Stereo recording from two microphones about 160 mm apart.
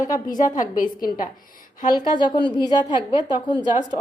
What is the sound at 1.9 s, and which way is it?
A woman's voice, 30° left (ahead or behind).